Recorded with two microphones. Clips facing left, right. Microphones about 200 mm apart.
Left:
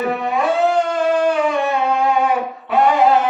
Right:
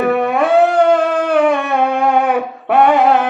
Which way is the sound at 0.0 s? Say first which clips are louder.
Right 5 dB; 60° right (ahead or behind).